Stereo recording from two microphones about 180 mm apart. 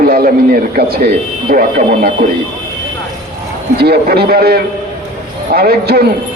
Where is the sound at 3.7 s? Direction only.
60° right (ahead or behind).